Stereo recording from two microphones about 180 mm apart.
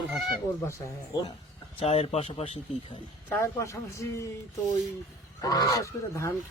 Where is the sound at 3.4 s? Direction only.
15° left (ahead or behind).